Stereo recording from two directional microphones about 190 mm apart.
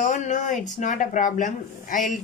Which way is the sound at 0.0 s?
40° left (ahead or behind).